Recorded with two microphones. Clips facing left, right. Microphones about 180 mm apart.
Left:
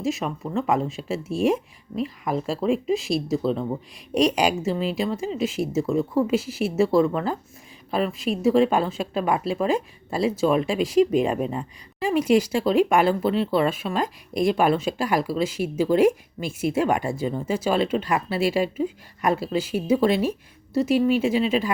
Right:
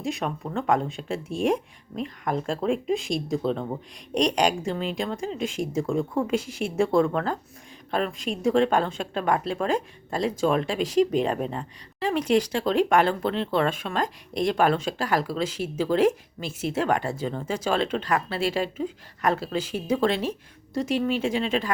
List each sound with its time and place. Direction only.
0.0 s speech: centre (ahead or behind)